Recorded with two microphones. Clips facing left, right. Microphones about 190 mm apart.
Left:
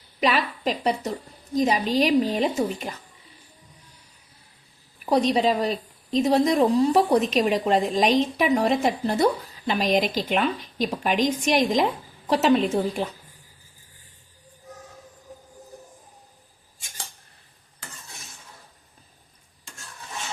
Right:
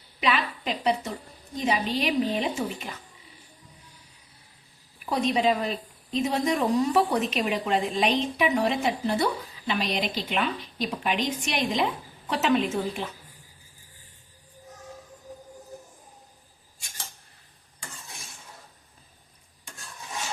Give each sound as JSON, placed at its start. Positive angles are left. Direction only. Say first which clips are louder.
{"t": 0.2, "sound": "a woman's voice", "louder": "left 3 dB", "side_deg": 45}
{"t": 5.0, "sound": "a woman's voice", "louder": "left 3 dB", "side_deg": 35}